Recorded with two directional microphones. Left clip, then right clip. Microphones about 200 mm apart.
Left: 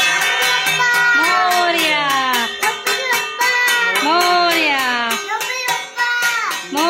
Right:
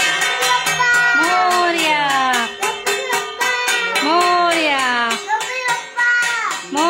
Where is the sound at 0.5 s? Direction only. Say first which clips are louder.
Even; 20° right (ahead or behind).